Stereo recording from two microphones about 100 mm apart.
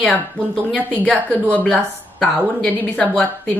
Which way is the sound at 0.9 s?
10° left (ahead or behind).